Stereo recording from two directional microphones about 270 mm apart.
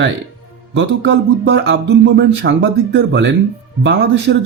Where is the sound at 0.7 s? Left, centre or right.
Right.